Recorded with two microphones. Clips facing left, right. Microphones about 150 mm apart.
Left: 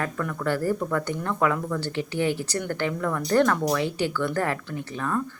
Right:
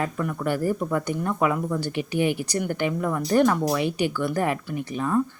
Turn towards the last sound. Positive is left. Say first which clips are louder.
# right 4 dB
turn(degrees=-15)  # may be behind; listen again after turning